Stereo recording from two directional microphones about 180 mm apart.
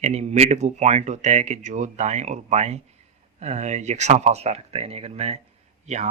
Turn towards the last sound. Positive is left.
turn(degrees=-40)  # may be behind; listen again after turning